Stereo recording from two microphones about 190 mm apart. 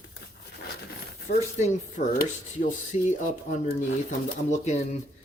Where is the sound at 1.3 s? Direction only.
40° left (ahead or behind).